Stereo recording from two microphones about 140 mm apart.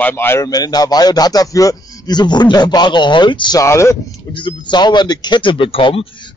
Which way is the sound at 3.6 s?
20° left (ahead or behind).